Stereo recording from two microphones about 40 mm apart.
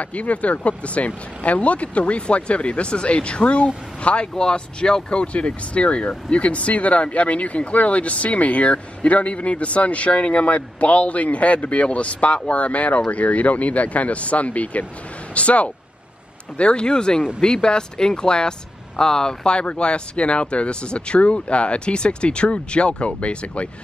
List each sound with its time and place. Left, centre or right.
0.0 s speech: left
4.3 s speech: centre